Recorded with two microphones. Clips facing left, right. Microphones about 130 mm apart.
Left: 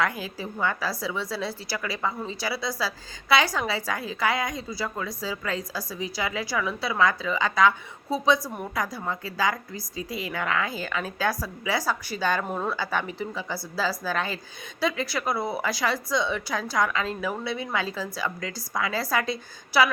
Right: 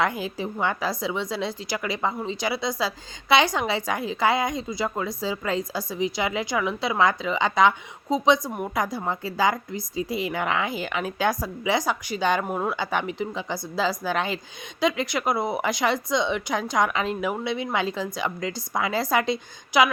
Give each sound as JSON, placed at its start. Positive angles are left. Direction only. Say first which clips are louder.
{"t": 0.0, "sound": "a woman's voice", "louder": "right 3 dB", "side_deg": -25}